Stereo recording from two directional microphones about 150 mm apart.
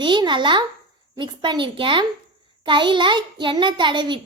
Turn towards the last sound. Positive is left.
turn(degrees=-30)  # may be behind; listen again after turning